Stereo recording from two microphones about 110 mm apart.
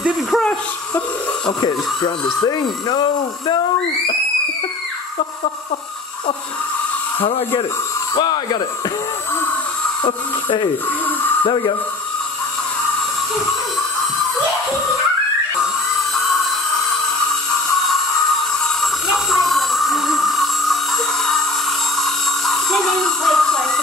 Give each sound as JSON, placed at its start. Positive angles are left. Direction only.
{"t": 0.3, "sound": "speech", "side_deg": 10}
{"t": 1.4, "sound": "speech", "side_deg": 45}
{"t": 7.2, "sound": "speech", "side_deg": 60}
{"t": 8.1, "sound": "speech", "side_deg": 40}
{"t": 11.4, "sound": "speech", "side_deg": 45}
{"t": 18.8, "sound": "a sound", "side_deg": 0}
{"t": 21.9, "sound": "a sound", "side_deg": 0}